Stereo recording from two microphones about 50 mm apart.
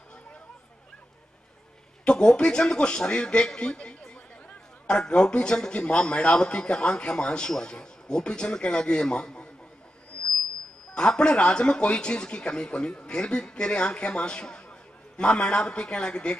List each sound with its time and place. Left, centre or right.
2.0 s a man's voice: centre
11.0 s speech: centre